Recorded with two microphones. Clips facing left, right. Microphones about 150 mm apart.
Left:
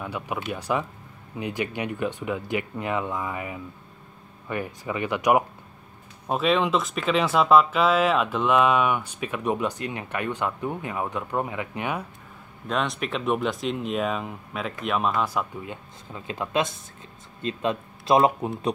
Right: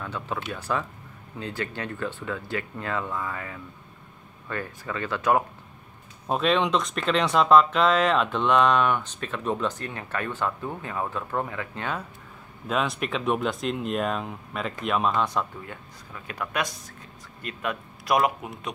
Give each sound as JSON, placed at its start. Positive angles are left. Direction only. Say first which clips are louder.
{"t": 0.0, "sound": "speech", "louder": "left 1 dB", "side_deg": 15}
{"t": 6.2, "sound": "speech", "louder": "left 1 dB", "side_deg": 0}
{"t": 12.6, "sound": "speech", "louder": "even", "side_deg": 0}
{"t": 15.6, "sound": "speech", "louder": "left 3 dB", "side_deg": 20}